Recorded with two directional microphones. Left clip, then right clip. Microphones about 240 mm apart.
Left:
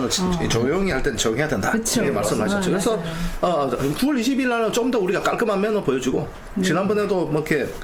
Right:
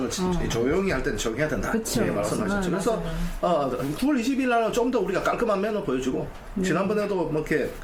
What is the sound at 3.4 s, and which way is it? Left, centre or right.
Speech, left.